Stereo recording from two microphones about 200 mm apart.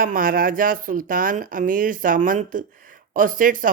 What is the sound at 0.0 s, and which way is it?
A woman's voice, 45° right (ahead or behind).